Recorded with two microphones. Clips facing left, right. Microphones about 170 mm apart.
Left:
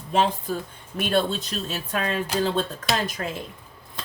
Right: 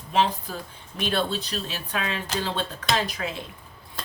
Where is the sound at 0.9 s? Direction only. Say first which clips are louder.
Left 3 dB; 50° left (ahead or behind).